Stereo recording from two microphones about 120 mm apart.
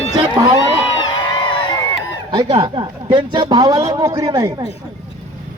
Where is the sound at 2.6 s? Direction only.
40° right (ahead or behind).